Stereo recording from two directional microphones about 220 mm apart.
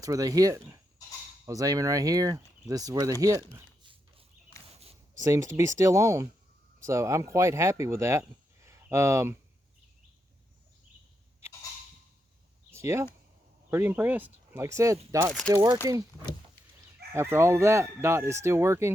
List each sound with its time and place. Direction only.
0.0 s speech: 15° right (ahead or behind)
4.8 s a sound: 25° right (ahead or behind)
5.2 s speech: 15° right (ahead or behind)
12.7 s speech: 10° right (ahead or behind)
15.3 s speech: centre (ahead or behind)
15.5 s speech: 15° right (ahead or behind)
17.2 s speech: 10° right (ahead or behind)